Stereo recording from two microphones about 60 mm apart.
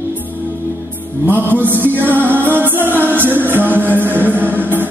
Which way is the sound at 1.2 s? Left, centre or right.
Right.